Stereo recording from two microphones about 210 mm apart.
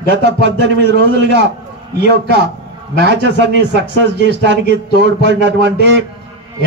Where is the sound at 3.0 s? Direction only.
55° right (ahead or behind).